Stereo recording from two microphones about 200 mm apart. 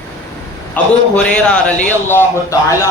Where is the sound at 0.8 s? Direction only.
10° left (ahead or behind).